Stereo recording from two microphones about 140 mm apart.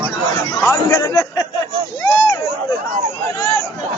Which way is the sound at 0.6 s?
20° left (ahead or behind).